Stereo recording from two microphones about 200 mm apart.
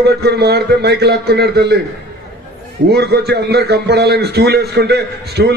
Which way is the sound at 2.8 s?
55° right (ahead or behind).